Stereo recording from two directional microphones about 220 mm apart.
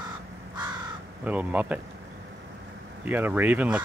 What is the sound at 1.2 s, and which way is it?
Speech, 5° right (ahead or behind).